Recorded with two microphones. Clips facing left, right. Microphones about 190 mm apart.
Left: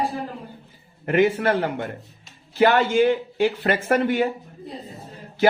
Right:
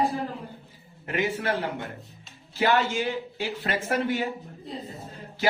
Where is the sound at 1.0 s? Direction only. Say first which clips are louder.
Left 8 dB; 55° left (ahead or behind).